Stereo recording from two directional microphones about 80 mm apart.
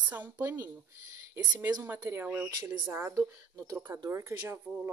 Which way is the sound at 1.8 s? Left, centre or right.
Right.